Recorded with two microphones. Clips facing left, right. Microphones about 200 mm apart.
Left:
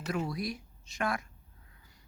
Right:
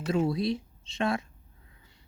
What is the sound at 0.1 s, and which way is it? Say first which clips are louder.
Speech: right 7 dB; 25° right (ahead or behind).